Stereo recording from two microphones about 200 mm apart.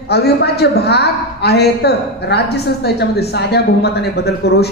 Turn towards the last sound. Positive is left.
turn(degrees=55)  # may be behind; listen again after turning